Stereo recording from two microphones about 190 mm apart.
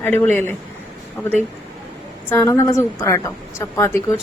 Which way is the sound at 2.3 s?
10° left (ahead or behind).